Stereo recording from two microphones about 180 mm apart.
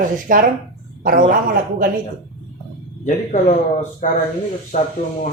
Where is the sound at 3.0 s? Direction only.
40° left (ahead or behind).